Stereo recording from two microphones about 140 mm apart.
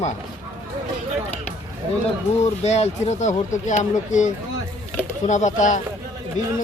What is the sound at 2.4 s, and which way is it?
Speech, 50° left (ahead or behind).